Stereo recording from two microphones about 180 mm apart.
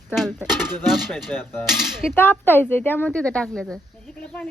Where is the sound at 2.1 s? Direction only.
10° left (ahead or behind).